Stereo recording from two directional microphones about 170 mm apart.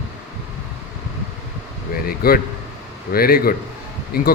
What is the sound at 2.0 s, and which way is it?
Speech, 60° left (ahead or behind).